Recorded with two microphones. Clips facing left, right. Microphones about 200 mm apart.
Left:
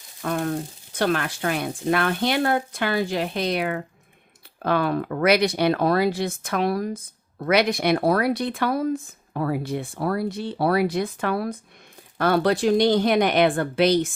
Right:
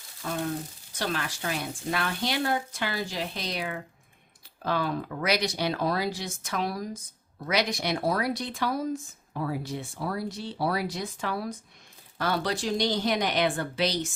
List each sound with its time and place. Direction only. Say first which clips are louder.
0.2 s speech: left 6 dB; 65° left (ahead or behind)